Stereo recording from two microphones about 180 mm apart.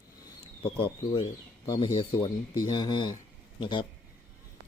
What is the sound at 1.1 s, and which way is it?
Speech, 20° left (ahead or behind).